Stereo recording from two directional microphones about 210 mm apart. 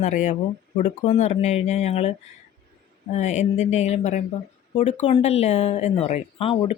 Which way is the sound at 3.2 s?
35° left (ahead or behind).